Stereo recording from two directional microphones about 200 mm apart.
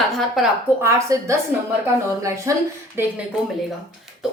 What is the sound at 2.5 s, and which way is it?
Speech, 15° right (ahead or behind).